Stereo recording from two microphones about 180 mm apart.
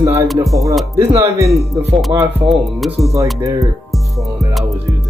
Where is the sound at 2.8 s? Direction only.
Centre (ahead or behind).